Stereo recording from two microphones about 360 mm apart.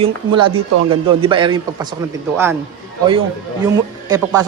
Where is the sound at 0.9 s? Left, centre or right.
Centre.